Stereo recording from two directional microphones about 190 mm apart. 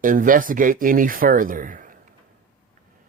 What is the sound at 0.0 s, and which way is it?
Speech, 45° right (ahead or behind).